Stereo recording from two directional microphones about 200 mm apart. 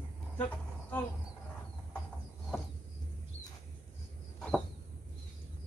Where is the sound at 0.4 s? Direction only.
10° left (ahead or behind).